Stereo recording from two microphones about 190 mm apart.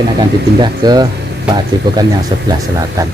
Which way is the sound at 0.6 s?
20° right (ahead or behind).